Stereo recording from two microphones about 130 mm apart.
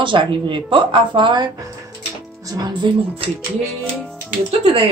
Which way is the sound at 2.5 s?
30° right (ahead or behind).